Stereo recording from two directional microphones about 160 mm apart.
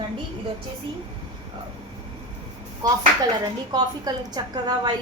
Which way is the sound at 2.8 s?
20° right (ahead or behind).